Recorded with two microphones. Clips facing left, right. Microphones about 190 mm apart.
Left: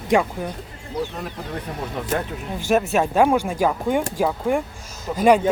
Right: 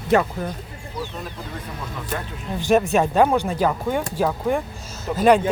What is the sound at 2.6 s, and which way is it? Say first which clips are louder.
Speech: right 2 dB; 5° left (ahead or behind).